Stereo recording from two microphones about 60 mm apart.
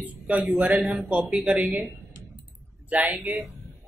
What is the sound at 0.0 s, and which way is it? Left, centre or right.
A man's voice, right.